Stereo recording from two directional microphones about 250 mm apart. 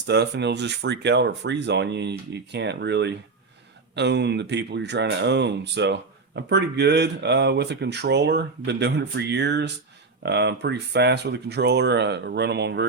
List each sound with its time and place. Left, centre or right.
0.1 s speech: right